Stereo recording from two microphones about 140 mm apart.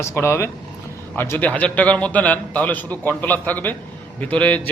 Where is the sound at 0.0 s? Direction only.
20° left (ahead or behind).